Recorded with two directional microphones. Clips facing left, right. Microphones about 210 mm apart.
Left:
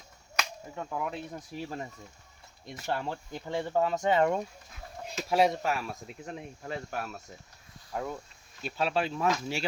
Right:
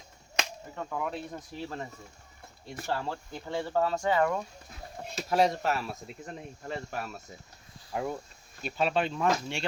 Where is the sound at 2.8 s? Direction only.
15° left (ahead or behind).